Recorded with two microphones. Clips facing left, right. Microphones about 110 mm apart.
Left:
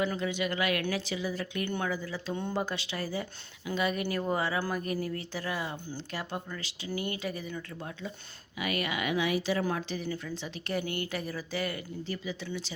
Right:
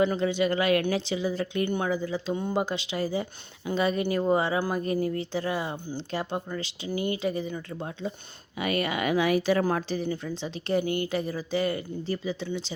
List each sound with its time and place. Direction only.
0.0 s speech: 30° right (ahead or behind)
3.7 s speech: 30° right (ahead or behind)
12.5 s speech: 25° right (ahead or behind)